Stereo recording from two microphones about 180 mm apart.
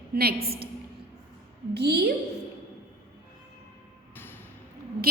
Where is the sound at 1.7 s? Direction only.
65° right (ahead or behind).